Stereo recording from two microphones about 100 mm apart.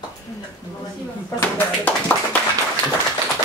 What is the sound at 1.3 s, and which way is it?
Clapping, 20° left (ahead or behind).